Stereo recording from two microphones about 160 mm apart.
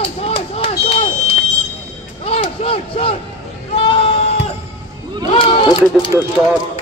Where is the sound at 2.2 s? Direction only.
35° left (ahead or behind).